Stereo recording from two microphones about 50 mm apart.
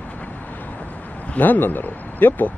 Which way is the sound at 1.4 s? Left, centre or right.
Left.